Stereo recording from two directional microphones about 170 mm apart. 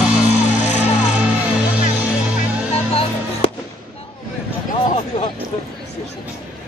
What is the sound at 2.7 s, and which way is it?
Music, 35° left (ahead or behind).